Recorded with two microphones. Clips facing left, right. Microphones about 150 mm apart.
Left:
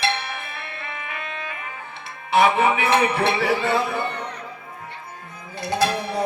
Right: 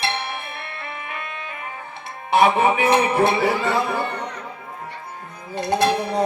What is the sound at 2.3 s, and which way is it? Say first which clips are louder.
A man's voice: right 1 dB; 45° right (ahead or behind).